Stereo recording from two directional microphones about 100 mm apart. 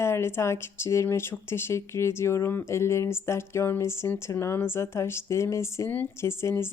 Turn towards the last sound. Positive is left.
turn(degrees=25)  # may be behind; listen again after turning